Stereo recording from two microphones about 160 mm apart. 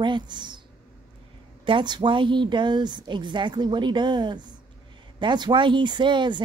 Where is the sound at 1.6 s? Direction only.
30° right (ahead or behind).